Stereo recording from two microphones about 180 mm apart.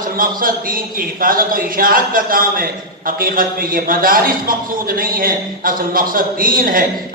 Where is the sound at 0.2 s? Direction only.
50° right (ahead or behind).